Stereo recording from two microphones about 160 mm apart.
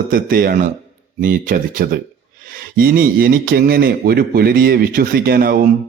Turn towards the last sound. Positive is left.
turn(degrees=-70)  # may be behind; listen again after turning